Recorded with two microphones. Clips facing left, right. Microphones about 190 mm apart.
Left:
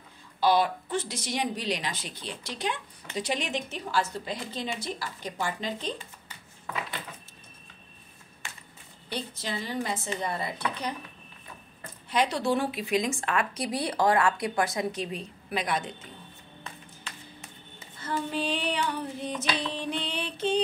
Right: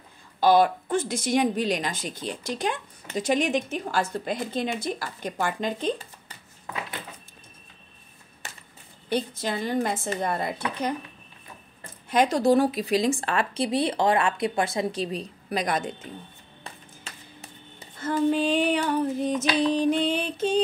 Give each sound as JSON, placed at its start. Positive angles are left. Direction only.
{"t": 0.4, "sound": "a woman's voice", "side_deg": -50}
{"t": 8.4, "sound": "a sound", "side_deg": -40}
{"t": 9.1, "sound": "a woman's voice", "side_deg": -50}
{"t": 12.1, "sound": "speech", "side_deg": -45}
{"t": 17.0, "sound": "music", "side_deg": -35}
{"t": 18.0, "sound": "a woman's voice", "side_deg": -50}